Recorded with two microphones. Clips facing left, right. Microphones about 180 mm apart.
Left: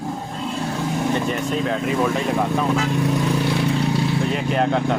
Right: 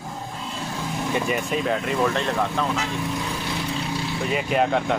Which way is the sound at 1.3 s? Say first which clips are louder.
Left 1 dB; 5° right (ahead or behind).